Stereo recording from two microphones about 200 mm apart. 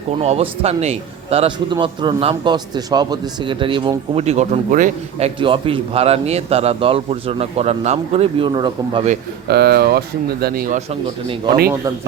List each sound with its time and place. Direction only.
0.2 s a man's voice: 30° right (ahead or behind)
5.4 s a man's voice: 25° right (ahead or behind)
9.5 s speech: 55° right (ahead or behind)
10.8 s a man's voice: 30° right (ahead or behind)